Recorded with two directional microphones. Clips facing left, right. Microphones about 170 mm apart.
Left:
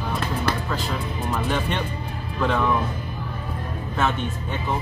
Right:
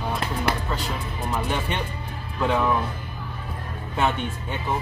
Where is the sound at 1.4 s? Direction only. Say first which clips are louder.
Left 2 dB; 15° right (ahead or behind).